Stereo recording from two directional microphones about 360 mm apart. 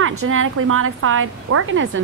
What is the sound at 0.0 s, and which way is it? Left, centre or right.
A woman's voice, right.